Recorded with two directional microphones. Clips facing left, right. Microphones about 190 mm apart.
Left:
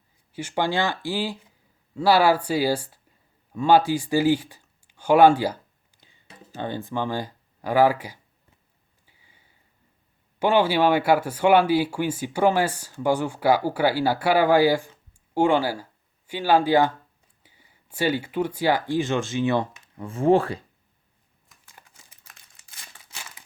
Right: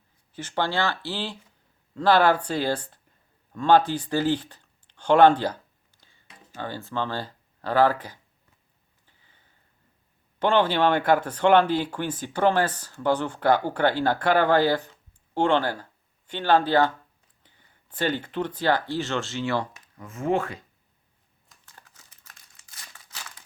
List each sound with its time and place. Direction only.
0.3 s speech: 10° left (ahead or behind)
6.2 s speech: 25° left (ahead or behind)
9.0 s a sound: 10° left (ahead or behind)
10.4 s speech: 10° left (ahead or behind)
20.0 s speech: 30° left (ahead or behind)
23.1 s crumpling: 10° left (ahead or behind)